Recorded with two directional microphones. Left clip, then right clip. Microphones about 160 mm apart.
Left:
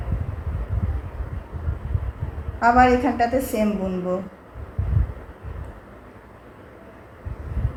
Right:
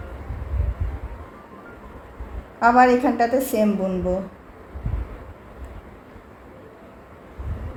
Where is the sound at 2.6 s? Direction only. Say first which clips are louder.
Right 1 dB; 35° right (ahead or behind).